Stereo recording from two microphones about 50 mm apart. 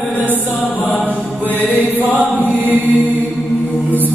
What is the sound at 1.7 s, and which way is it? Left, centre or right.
Chant, left.